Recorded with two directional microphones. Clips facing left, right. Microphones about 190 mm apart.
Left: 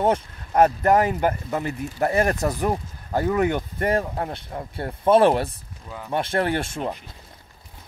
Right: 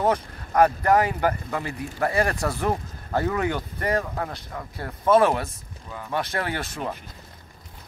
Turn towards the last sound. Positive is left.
turn(degrees=25)  # may be behind; listen again after turning